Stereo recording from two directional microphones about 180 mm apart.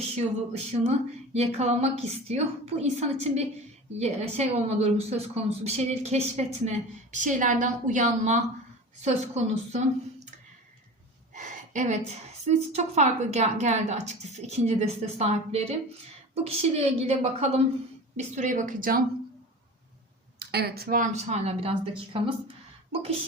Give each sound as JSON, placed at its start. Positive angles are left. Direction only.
{"t": 0.0, "sound": "a woman's voice", "side_deg": -35}
{"t": 11.3, "sound": "a woman's voice", "side_deg": -40}
{"t": 20.4, "sound": "a woman's voice", "side_deg": -65}